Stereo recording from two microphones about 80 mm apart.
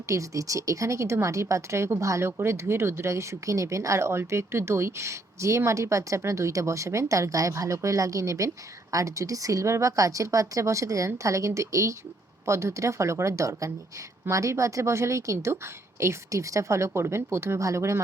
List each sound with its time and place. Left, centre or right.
0.1 s a woman's voice: right